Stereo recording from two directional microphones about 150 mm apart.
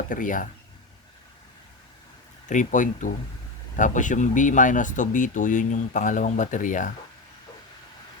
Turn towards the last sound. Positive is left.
turn(degrees=60)  # may be behind; listen again after turning